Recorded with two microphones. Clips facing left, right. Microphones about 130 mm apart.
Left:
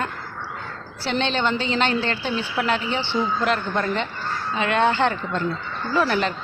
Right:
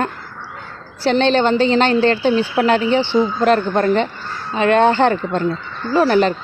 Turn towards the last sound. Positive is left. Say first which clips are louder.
# right 7 dB
turn(degrees=-35)  # may be behind; listen again after turning